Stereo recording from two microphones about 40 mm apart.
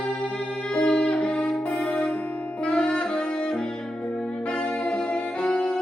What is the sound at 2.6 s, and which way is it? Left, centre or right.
Music, left.